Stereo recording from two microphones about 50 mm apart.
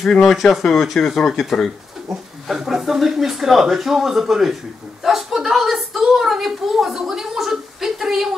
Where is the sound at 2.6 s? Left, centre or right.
Centre.